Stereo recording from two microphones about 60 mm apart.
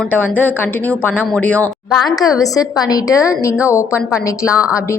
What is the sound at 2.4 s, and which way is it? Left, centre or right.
Speech, left.